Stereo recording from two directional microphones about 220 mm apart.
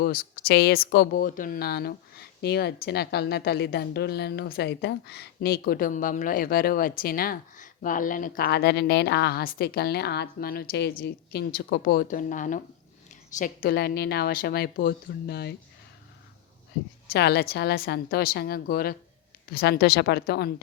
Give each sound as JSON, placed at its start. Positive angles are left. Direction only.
{"t": 0.0, "sound": "speech", "side_deg": 40}
{"t": 17.1, "sound": "speech", "side_deg": 50}